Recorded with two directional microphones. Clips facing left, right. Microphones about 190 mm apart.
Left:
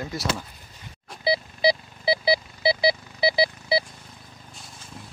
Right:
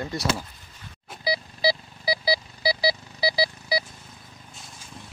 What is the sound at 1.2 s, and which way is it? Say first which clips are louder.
Alarm clock: left 3 dB; 25° left (ahead or behind).